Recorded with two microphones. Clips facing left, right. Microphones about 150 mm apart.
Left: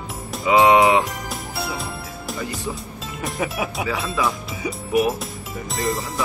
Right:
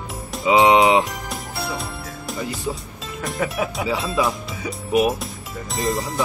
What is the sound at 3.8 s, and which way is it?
Livestock, 20° right (ahead or behind).